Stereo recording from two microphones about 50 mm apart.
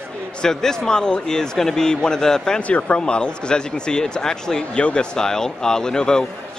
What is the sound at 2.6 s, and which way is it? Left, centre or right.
Speech, left.